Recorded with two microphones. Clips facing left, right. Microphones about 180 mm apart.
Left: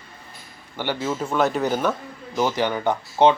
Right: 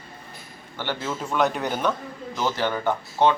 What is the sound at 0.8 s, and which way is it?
Speech, 10° left (ahead or behind).